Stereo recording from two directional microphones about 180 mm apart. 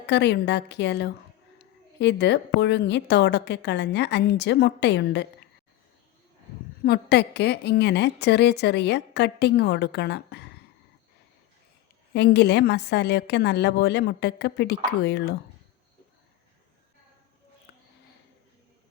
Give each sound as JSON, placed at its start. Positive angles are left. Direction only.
{"t": 0.0, "sound": "a woman's voice", "side_deg": 70}
{"t": 6.8, "sound": "a woman's voice", "side_deg": 65}
{"t": 12.1, "sound": "a woman's voice", "side_deg": 70}